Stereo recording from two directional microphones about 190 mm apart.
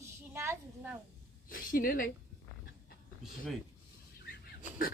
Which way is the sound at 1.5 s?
45° left (ahead or behind).